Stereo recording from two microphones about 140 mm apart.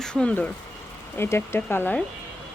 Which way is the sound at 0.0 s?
5° left (ahead or behind).